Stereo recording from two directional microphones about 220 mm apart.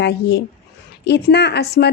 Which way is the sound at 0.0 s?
50° left (ahead or behind).